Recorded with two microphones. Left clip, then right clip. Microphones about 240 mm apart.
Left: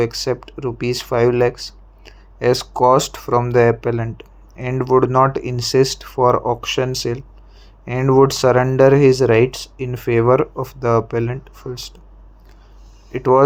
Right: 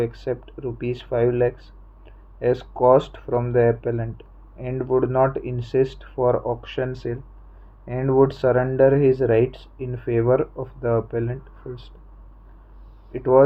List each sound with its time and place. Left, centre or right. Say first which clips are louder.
0.0 s speech: left 6 dB; left
13.1 s speech: left 3 dB; centre